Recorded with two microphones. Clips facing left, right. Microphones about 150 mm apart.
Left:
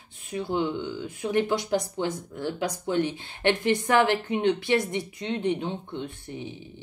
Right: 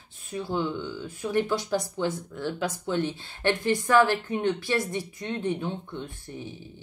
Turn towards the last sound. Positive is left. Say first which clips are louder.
# left 2 dB
turn(degrees=20)  # may be behind; listen again after turning